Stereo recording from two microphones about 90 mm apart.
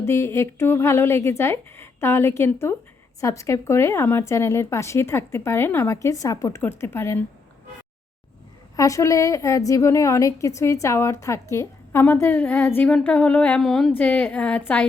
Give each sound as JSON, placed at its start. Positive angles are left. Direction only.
{"t": 0.0, "sound": "a woman's voice", "side_deg": 30}
{"t": 6.6, "sound": "speech", "side_deg": 25}
{"t": 8.7, "sound": "a woman's voice", "side_deg": 35}
{"t": 13.6, "sound": "a sound", "side_deg": 5}
{"t": 14.0, "sound": "a woman's voice", "side_deg": 20}